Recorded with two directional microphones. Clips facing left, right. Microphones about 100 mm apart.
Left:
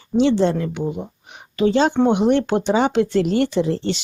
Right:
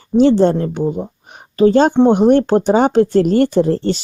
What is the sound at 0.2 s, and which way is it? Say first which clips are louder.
Speech: right 5 dB; 45° right (ahead or behind).